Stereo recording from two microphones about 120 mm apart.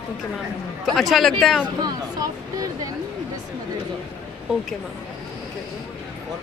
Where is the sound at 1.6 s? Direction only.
35° right (ahead or behind).